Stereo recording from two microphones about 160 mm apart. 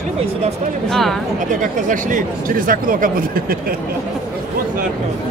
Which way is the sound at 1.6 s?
55° right (ahead or behind).